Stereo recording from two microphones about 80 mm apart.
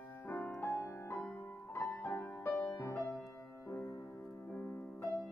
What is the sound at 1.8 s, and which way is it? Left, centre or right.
Music, left.